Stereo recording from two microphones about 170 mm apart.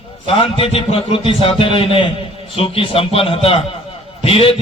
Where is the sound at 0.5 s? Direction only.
35° left (ahead or behind).